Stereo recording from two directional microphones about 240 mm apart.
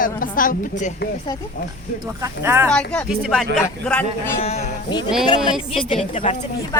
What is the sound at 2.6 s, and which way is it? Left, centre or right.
Speech, centre.